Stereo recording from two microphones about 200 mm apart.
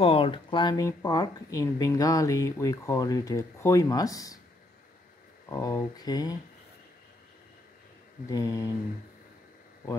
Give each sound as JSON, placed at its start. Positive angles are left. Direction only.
{"t": 0.0, "sound": "speech", "side_deg": 30}
{"t": 5.5, "sound": "speech", "side_deg": 15}
{"t": 8.3, "sound": "speech", "side_deg": 15}